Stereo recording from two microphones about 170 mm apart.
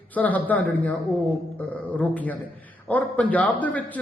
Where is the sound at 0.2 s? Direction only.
10° left (ahead or behind).